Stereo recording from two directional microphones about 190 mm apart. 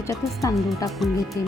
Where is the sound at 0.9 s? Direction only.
Centre (ahead or behind).